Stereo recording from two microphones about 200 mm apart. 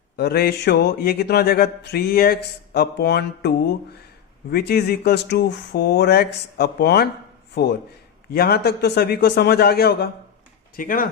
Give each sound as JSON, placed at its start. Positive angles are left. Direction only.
{"t": 0.2, "sound": "speech", "side_deg": 50}
{"t": 4.5, "sound": "speech", "side_deg": 50}